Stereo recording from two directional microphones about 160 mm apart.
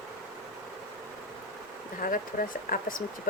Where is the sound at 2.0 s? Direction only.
60° left (ahead or behind).